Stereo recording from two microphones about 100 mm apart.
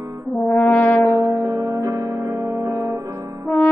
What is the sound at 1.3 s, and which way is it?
Music, 40° right (ahead or behind).